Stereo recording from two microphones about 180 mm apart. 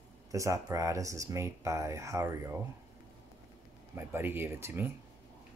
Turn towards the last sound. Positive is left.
turn(degrees=-15)  # may be behind; listen again after turning